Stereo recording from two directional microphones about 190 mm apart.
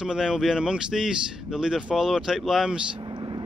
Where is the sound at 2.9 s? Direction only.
25° right (ahead or behind).